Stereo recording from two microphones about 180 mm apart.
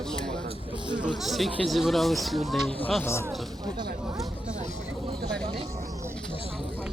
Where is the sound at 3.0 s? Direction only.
15° left (ahead or behind).